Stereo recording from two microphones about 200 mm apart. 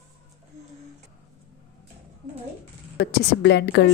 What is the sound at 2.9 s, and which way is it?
Speech, 55° left (ahead or behind).